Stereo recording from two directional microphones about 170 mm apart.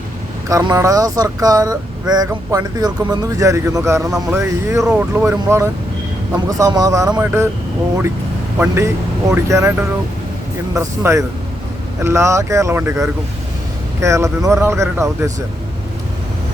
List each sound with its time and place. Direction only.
0.4 s speech: 20° right (ahead or behind)
4.9 s speech: 5° right (ahead or behind)
5.5 s speech: 15° right (ahead or behind)
8.5 s speech: 10° right (ahead or behind)